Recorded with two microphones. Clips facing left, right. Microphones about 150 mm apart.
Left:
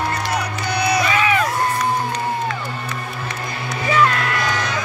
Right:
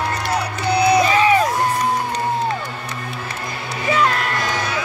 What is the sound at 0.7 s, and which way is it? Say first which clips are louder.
Music: right 4 dB; 30° right (ahead or behind).